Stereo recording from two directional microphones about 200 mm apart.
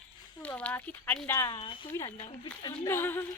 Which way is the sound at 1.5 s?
25° left (ahead or behind).